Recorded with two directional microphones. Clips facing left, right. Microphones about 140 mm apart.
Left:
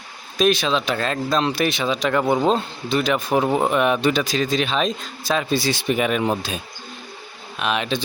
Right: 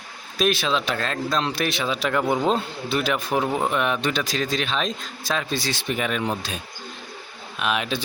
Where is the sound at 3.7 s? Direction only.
5° left (ahead or behind).